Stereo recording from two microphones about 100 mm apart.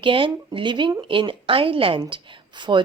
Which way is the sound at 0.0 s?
60° right (ahead or behind).